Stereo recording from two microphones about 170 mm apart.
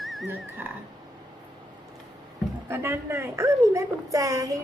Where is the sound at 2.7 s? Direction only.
15° right (ahead or behind).